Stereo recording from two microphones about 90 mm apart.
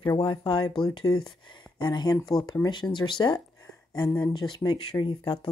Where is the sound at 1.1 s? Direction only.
45° left (ahead or behind); by 5.5 s 65° left (ahead or behind).